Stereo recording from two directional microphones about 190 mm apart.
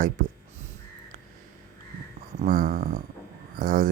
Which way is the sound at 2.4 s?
50° right (ahead or behind).